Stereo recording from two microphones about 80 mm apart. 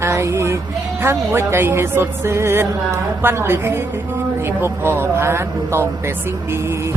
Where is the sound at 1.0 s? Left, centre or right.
Right.